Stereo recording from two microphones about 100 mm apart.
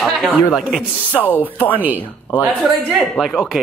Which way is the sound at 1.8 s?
15° right (ahead or behind).